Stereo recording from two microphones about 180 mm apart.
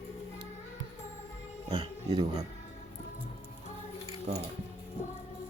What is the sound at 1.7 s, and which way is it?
Speech, 20° right (ahead or behind).